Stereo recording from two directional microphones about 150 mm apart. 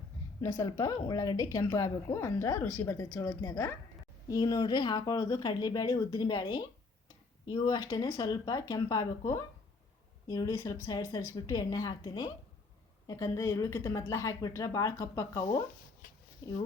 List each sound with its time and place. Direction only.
0.4 s a woman's voice: 20° left (ahead or behind)